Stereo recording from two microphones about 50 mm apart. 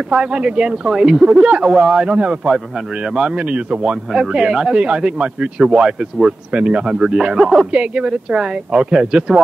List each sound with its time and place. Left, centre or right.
0.1 s speech: centre
0.9 s speech: centre
2.4 s speech: centre
7.7 s speech: right